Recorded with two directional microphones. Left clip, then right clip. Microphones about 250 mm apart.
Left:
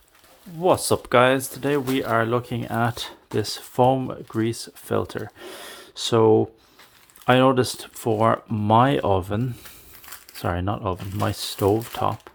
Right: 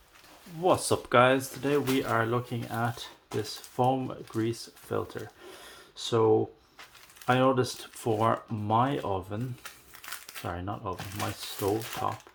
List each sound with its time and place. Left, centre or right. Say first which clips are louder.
0.6 s speech: left 6 dB; left
10.4 s speech: left 10 dB; left